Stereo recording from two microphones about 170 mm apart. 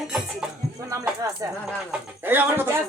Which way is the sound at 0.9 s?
20° right (ahead or behind).